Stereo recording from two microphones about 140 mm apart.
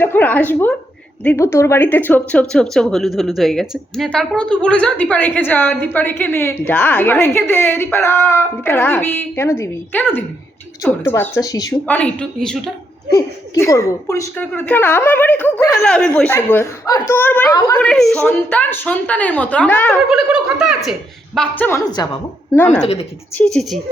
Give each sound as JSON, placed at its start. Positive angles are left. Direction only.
{"t": 0.0, "sound": "speech", "side_deg": 15}
{"t": 11.9, "sound": "speech", "side_deg": 10}
{"t": 13.1, "sound": "speech", "side_deg": 25}
{"t": 20.1, "sound": "speech", "side_deg": -5}
{"t": 21.3, "sound": "speech", "side_deg": 10}
{"t": 21.8, "sound": "a woman's voice", "side_deg": 30}
{"t": 22.5, "sound": "speech", "side_deg": 15}
{"t": 22.8, "sound": "a woman's voice", "side_deg": 50}
{"t": 23.3, "sound": "speech", "side_deg": 5}